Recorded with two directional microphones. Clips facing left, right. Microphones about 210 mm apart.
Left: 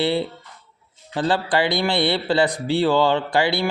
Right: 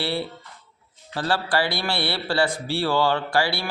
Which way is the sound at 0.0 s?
20° left (ahead or behind).